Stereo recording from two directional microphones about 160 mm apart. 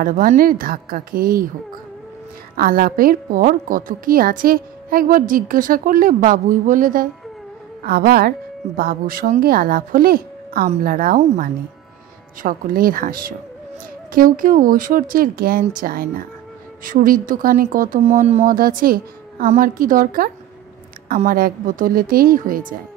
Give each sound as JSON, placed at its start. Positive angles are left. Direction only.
{"t": 0.0, "sound": "a woman's voice", "side_deg": -60}
{"t": 2.5, "sound": "a woman's voice", "side_deg": -65}
{"t": 7.8, "sound": "a woman's voice", "side_deg": -70}
{"t": 18.0, "sound": "a woman's voice", "side_deg": -45}
{"t": 21.3, "sound": "a woman's voice", "side_deg": -65}